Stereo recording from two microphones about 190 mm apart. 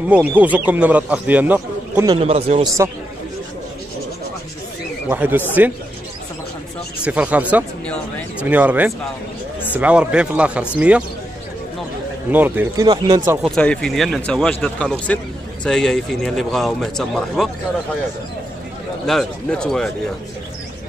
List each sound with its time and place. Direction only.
0.1 s speech: 10° right (ahead or behind)
2.0 s a man's voice: 30° right (ahead or behind)
5.1 s speech: 10° right (ahead or behind)
7.0 s speech: 5° right (ahead or behind)
12.3 s speech: 10° right (ahead or behind)
12.8 s speech: 20° right (ahead or behind)
13.6 s speech: 5° left (ahead or behind)
19.0 s speech: 5° left (ahead or behind)